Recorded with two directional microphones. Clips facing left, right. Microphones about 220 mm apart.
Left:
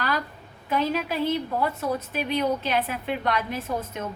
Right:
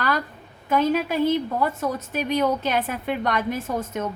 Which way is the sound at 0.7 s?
50° right (ahead or behind).